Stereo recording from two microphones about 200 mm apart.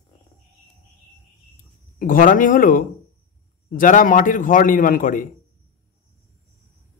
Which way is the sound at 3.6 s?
40° left (ahead or behind).